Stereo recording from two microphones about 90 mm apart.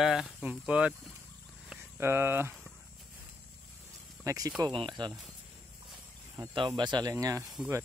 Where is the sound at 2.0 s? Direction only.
25° right (ahead or behind).